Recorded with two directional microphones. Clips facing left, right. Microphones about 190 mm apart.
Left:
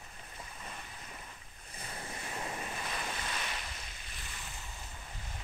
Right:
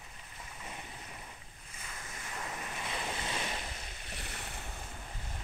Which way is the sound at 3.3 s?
25° right (ahead or behind).